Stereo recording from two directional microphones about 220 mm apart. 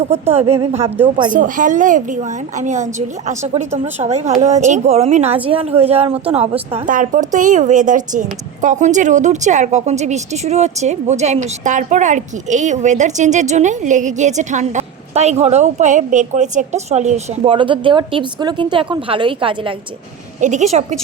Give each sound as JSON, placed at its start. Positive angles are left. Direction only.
{"t": 0.3, "sound": "a woman's voice", "side_deg": -25}
{"t": 3.7, "sound": "a woman's voice", "side_deg": -10}
{"t": 4.0, "sound": "a woman's voice", "side_deg": -30}
{"t": 20.4, "sound": "speech", "side_deg": -35}